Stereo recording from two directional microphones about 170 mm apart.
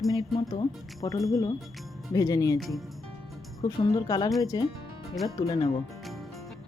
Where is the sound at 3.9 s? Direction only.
20° left (ahead or behind).